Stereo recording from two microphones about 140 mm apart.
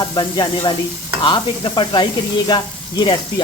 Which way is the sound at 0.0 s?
30° left (ahead or behind).